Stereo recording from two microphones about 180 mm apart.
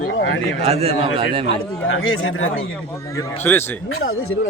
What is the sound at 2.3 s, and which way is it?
Speech, 90° left.